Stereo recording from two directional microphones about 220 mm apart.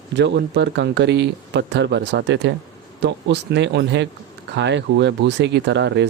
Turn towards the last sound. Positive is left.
turn(degrees=-50)  # may be behind; listen again after turning